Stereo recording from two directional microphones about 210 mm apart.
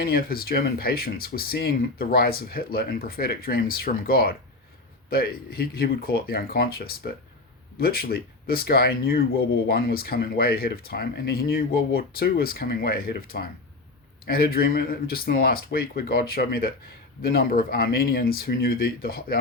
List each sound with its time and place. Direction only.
0.0 s speech: 45° left (ahead or behind)